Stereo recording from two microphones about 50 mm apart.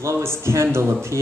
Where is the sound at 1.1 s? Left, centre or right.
Right.